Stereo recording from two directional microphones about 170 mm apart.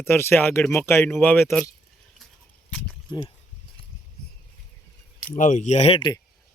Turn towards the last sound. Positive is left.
turn(degrees=35)  # may be behind; listen again after turning